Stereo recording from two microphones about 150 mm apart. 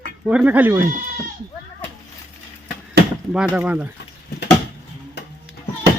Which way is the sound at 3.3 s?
10° right (ahead or behind).